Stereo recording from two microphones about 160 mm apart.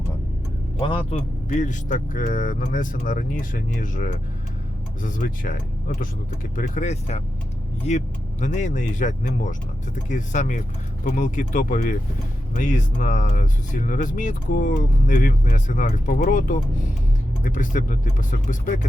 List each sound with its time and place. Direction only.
0.8 s speech: 30° left (ahead or behind)
1.5 s speech: 50° left (ahead or behind)
6.6 s speech: 50° left (ahead or behind)